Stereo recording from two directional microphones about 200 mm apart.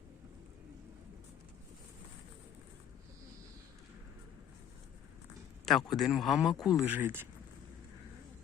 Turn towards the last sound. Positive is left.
turn(degrees=-10)  # may be behind; listen again after turning